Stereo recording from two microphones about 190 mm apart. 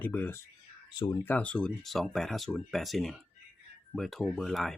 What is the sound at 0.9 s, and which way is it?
Speech, 25° left (ahead or behind).